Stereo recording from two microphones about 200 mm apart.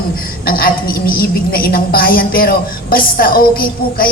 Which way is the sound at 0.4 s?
45° left (ahead or behind).